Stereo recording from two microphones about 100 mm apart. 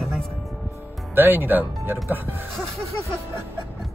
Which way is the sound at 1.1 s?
20° right (ahead or behind).